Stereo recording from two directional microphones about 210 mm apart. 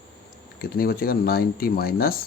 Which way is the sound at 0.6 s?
45° left (ahead or behind).